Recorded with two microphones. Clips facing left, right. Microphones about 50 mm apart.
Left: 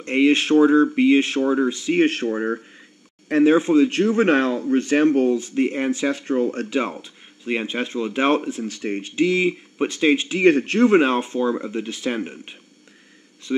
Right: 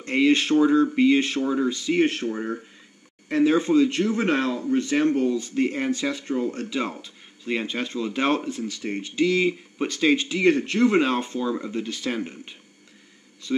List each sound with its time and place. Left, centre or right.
0.0 s speech: left
2.0 s speech: left
2.2 s speech: left
3.3 s speech: left
3.5 s speech: left
5.5 s speech: left
6.1 s speech: left
6.8 s speech: left
9.4 s speech: centre
10.2 s speech: left
11.1 s speech: centre